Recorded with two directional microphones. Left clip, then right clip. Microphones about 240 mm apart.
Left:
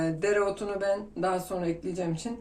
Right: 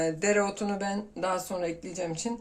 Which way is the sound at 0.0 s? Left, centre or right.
Right.